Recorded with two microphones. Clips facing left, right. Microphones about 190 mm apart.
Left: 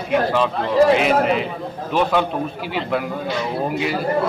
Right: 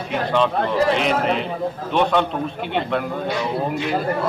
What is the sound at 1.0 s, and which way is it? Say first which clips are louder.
A man's voice: left 3 dB; 5° left (ahead or behind).